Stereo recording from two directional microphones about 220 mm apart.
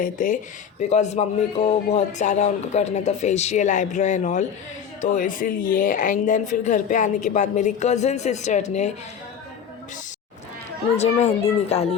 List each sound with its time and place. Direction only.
0.0 s speech: 35° left (ahead or behind)
10.9 s a child's voice: 30° left (ahead or behind)